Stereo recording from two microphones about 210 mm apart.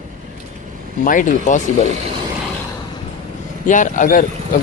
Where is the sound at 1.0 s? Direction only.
40° left (ahead or behind).